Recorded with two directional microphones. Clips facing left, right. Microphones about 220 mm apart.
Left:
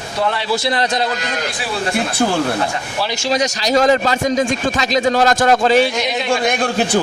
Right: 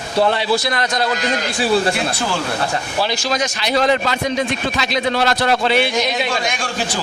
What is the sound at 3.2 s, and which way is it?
A man's voice, 35° left (ahead or behind).